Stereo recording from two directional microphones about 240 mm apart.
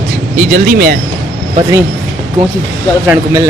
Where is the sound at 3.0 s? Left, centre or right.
Centre.